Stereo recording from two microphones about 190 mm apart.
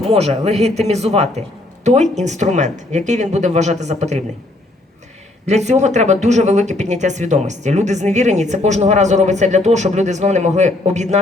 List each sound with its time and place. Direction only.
0.1 s speech: 35° right (ahead or behind)
5.5 s speech: 35° right (ahead or behind)